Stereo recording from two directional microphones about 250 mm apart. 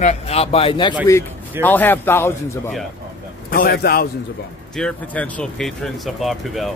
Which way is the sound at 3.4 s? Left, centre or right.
Left.